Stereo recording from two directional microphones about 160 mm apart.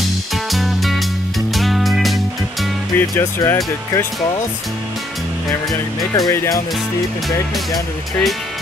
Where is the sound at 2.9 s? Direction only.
15° left (ahead or behind).